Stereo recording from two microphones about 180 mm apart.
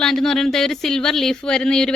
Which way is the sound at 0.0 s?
Centre (ahead or behind).